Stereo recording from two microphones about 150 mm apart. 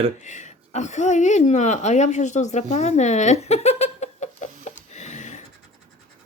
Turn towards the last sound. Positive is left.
turn(degrees=50)  # may be behind; listen again after turning